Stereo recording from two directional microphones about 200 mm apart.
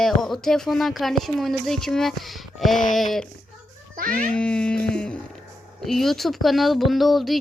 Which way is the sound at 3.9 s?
45° right (ahead or behind).